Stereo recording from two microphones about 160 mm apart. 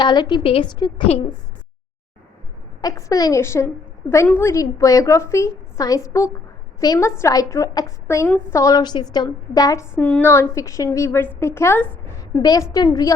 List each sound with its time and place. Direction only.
0.0 s a woman's voice: 30° left (ahead or behind)
2.8 s a woman's voice: 20° left (ahead or behind)
10.0 s a woman's voice: 10° left (ahead or behind)